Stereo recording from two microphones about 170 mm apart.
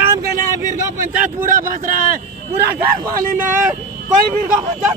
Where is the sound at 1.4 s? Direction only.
55° right (ahead or behind).